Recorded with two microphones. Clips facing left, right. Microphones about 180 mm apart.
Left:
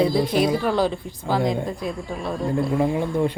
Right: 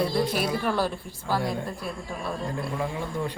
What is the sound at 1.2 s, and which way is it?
Speech, 20° left (ahead or behind).